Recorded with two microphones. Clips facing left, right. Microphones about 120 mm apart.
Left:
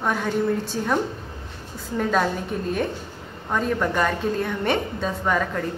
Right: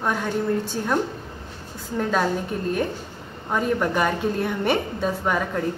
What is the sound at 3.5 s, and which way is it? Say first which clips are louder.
A woman's voice: right 1 dB; 5° right (ahead or behind).